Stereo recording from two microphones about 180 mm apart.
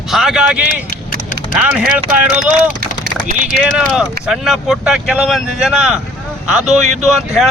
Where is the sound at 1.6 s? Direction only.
5° right (ahead or behind).